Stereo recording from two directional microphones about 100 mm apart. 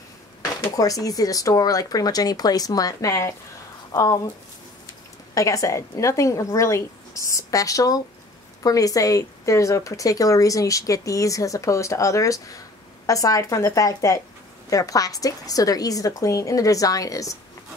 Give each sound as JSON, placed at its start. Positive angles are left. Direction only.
{"t": 0.7, "sound": "speech", "side_deg": 35}
{"t": 5.3, "sound": "speech", "side_deg": 35}